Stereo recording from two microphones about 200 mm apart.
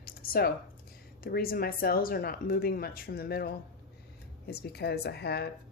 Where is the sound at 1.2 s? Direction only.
50° left (ahead or behind).